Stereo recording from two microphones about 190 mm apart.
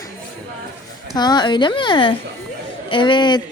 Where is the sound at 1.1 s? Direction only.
20° left (ahead or behind).